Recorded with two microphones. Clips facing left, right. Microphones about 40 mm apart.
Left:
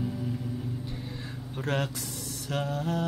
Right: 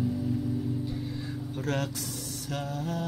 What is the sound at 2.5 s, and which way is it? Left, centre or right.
Music, left.